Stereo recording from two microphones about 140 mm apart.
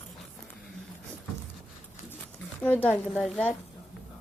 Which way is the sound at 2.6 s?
10° left (ahead or behind).